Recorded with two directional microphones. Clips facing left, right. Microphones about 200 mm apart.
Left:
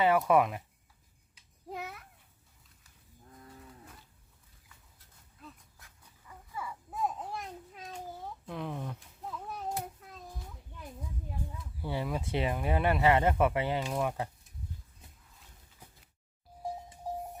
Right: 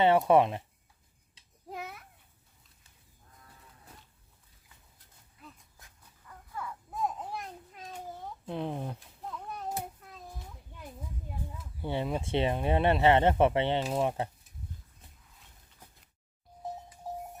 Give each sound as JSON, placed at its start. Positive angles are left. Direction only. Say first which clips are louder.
{"t": 0.0, "sound": "speech", "louder": "right 3 dB", "side_deg": -30}
{"t": 1.7, "sound": "babbling", "louder": "even", "side_deg": 0}
{"t": 6.2, "sound": "a sound", "louder": "right 1 dB", "side_deg": 5}
{"t": 8.4, "sound": "speech", "louder": "right 4 dB", "side_deg": -30}
{"t": 9.0, "sound": "a sound", "louder": "even", "side_deg": 5}
{"t": 11.8, "sound": "speech", "louder": "right 2 dB", "side_deg": -25}